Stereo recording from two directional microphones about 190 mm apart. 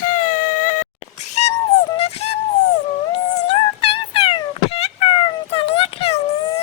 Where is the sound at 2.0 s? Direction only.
35° left (ahead or behind).